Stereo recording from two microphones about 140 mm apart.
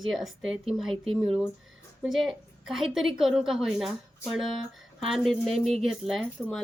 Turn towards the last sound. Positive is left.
turn(degrees=0)  # may be behind; listen again after turning